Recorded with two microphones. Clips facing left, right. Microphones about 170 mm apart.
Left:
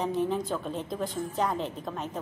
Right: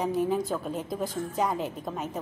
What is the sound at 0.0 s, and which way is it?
A woman's voice, 5° right (ahead or behind).